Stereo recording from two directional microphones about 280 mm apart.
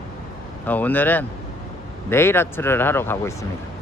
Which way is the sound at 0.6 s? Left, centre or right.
Centre.